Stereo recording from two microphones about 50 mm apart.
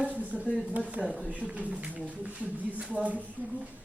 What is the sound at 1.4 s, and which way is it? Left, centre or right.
A woman's voice, right.